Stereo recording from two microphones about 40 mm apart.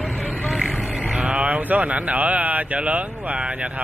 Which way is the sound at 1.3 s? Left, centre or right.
Right.